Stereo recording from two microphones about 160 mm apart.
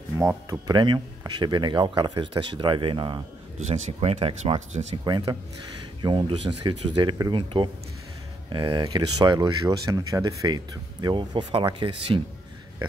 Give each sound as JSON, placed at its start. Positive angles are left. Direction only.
{"t": 0.5, "sound": "speech", "side_deg": -25}